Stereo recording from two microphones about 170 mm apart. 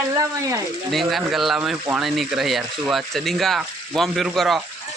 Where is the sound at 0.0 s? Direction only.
20° right (ahead or behind).